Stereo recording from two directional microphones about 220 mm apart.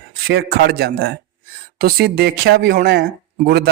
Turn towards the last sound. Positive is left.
turn(degrees=-45)  # may be behind; listen again after turning